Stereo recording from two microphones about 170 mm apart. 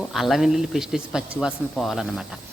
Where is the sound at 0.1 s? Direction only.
Centre (ahead or behind).